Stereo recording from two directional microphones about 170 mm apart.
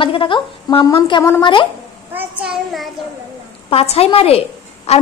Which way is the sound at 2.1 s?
5° right (ahead or behind).